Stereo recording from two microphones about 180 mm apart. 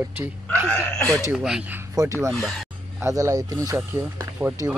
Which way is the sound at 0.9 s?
5° left (ahead or behind).